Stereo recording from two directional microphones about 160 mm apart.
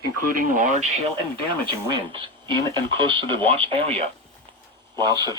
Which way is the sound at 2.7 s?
30° right (ahead or behind).